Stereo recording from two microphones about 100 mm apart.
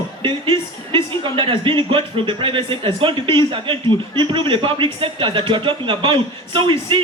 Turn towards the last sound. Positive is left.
turn(degrees=-60)  # may be behind; listen again after turning